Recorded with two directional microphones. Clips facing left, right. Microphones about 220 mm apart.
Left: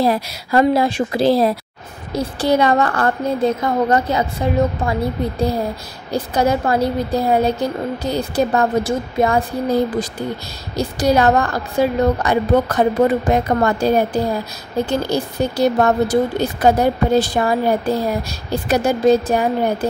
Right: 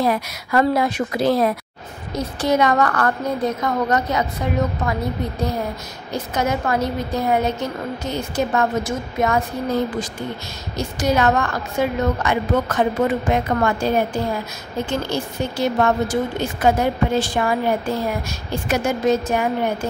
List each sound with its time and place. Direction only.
0.0 s a woman's voice: 30° left (ahead or behind)
6.1 s a woman's voice: 35° left (ahead or behind)